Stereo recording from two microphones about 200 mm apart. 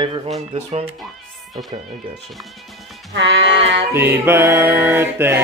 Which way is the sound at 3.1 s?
65° right (ahead or behind).